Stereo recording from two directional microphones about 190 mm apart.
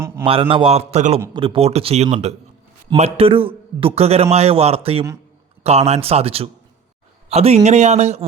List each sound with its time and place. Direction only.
0.3 s a man's voice: 30° right (ahead or behind)